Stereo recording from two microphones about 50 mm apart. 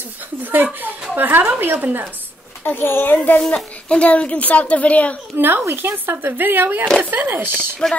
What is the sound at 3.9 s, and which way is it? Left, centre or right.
A child's voice, left.